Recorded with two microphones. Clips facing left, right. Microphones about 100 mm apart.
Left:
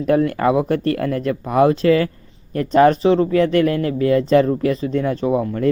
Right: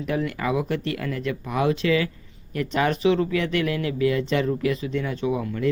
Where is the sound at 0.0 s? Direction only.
45° left (ahead or behind).